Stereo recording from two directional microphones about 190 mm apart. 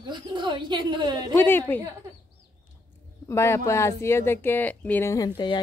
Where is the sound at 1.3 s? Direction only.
10° left (ahead or behind).